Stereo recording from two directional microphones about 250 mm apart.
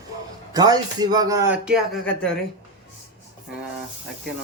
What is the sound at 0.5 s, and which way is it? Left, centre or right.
Speech, centre.